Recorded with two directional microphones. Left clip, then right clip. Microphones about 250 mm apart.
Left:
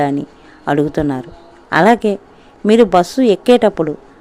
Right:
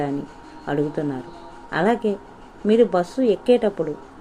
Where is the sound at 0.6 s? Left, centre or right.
Left.